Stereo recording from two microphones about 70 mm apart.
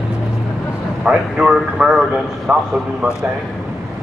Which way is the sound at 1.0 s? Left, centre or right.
Centre.